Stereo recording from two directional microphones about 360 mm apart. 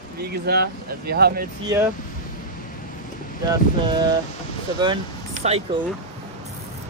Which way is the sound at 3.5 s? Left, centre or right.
Centre.